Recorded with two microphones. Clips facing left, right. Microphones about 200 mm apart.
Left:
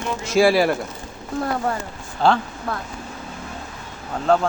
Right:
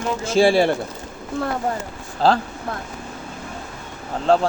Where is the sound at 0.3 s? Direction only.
30° right (ahead or behind).